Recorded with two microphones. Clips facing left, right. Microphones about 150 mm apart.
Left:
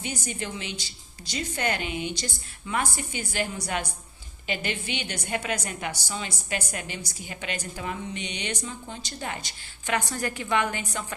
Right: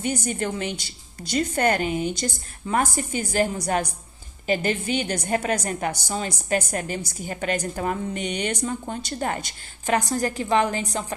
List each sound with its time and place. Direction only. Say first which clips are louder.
0.0 s a woman's voice: right 8 dB; 50° right (ahead or behind); by 11.0 s 35° right (ahead or behind)